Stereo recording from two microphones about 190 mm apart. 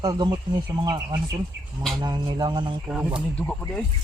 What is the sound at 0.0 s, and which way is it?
Speech, 20° right (ahead or behind).